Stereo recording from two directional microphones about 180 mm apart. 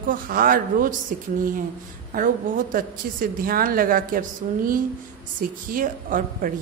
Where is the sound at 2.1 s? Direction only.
50° right (ahead or behind).